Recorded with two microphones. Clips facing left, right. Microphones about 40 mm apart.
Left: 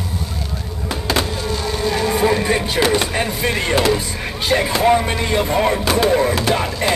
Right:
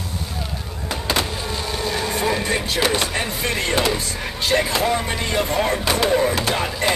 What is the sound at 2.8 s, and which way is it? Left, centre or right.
Speech, centre.